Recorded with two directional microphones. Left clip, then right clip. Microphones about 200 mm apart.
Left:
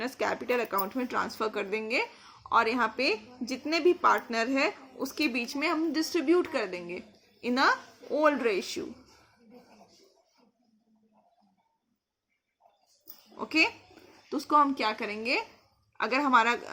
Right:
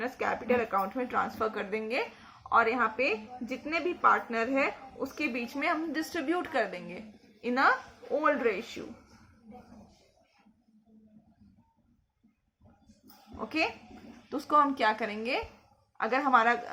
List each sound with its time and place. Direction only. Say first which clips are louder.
0.0 s a woman's voice: left 1 dB; 45° left (ahead or behind)
2.5 s a woman's voice: even; 45° left (ahead or behind)
6.1 s speech: left 6 dB; 30° left (ahead or behind)
7.4 s a woman's voice: even; 45° left (ahead or behind)
14.3 s a woman's voice: left 1 dB; 25° left (ahead or behind)